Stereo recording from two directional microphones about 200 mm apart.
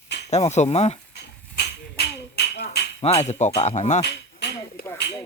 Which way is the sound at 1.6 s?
55° left (ahead or behind).